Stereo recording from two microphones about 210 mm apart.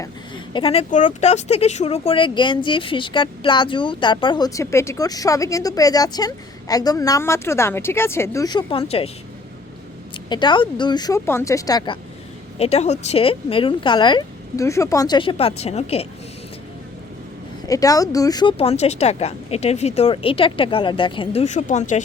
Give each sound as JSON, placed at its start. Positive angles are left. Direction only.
{"t": 0.5, "sound": "speech", "side_deg": 25}
{"t": 10.2, "sound": "speech", "side_deg": 20}
{"t": 12.5, "sound": "speech", "side_deg": 30}
{"t": 17.7, "sound": "speech", "side_deg": 15}